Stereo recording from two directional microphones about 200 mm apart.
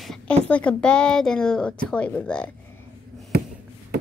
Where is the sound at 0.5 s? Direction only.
5° left (ahead or behind).